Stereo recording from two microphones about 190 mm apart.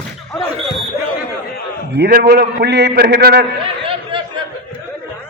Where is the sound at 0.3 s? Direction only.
20° left (ahead or behind).